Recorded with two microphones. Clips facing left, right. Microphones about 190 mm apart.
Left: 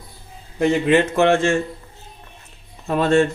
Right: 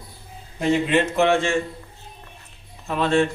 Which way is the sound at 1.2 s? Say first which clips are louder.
Left 3 dB; 50° left (ahead or behind).